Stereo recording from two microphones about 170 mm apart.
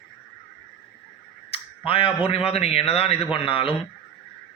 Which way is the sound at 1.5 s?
35° left (ahead or behind).